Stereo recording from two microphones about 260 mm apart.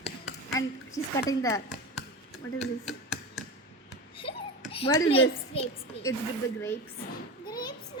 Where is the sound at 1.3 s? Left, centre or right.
Centre.